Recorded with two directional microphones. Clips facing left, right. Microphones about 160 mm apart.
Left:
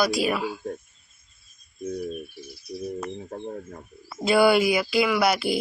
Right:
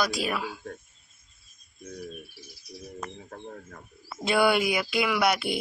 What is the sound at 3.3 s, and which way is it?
Speech, 25° left (ahead or behind).